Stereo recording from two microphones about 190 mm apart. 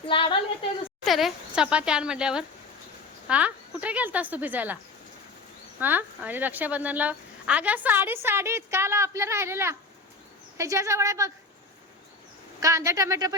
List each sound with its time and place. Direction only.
0.1 s a sound: 25° left (ahead or behind)
1.0 s speech: centre (ahead or behind)
5.8 s speech: 10° right (ahead or behind)
12.5 s speech: 15° right (ahead or behind)